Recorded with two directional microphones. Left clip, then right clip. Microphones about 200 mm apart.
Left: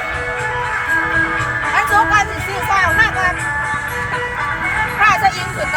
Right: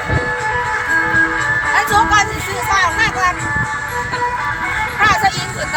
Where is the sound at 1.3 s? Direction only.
35° left (ahead or behind).